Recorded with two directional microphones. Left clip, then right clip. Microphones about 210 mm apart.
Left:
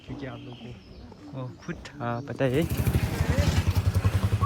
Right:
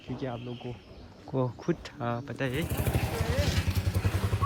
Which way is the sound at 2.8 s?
35° left (ahead or behind).